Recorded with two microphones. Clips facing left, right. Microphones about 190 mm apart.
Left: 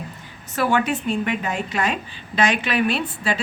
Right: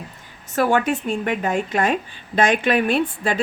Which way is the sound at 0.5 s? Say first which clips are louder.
Right 2 dB; 45° right (ahead or behind).